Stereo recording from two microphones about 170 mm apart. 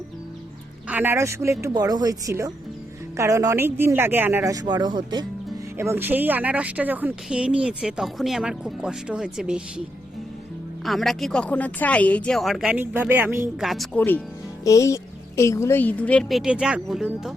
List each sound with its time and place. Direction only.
0.9 s speech: 10° right (ahead or behind)
10.8 s speech: centre (ahead or behind)
12.8 s speech: 10° right (ahead or behind)
14.6 s speech: 20° left (ahead or behind); by 17.3 s 5° right (ahead or behind)